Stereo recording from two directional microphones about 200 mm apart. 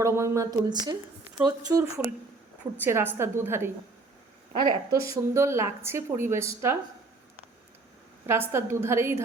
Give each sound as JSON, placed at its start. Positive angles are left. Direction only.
{"t": 0.0, "sound": "a woman's voice", "side_deg": -15}
{"t": 8.3, "sound": "a woman's voice", "side_deg": -10}